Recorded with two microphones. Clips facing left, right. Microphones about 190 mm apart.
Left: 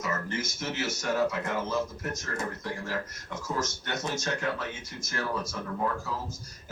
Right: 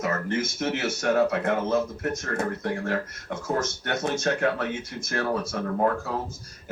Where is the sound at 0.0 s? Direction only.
60° right (ahead or behind).